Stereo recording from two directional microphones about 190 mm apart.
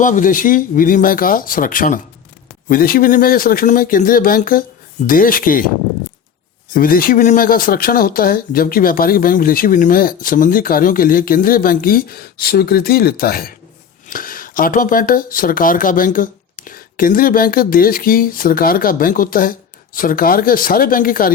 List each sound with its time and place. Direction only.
0.0 s speech: 45° left (ahead or behind)
6.7 s speech: 50° left (ahead or behind)